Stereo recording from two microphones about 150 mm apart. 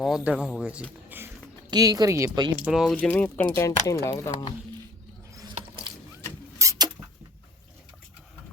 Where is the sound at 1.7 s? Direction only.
25° right (ahead or behind).